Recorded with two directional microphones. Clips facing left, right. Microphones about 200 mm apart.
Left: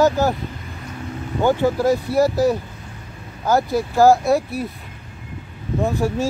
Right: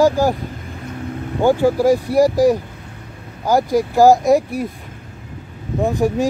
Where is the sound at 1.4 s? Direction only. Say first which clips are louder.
Right 3 dB; 10° right (ahead or behind).